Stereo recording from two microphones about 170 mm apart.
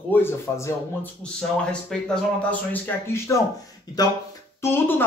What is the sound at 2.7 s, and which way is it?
Speech, 15° left (ahead or behind).